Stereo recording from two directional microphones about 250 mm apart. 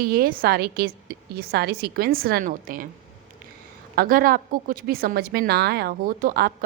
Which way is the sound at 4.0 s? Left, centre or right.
Right.